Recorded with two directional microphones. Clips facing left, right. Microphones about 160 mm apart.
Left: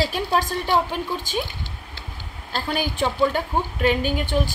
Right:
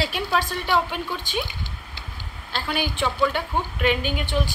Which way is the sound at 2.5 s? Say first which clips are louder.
Left 2 dB; 40° left (ahead or behind).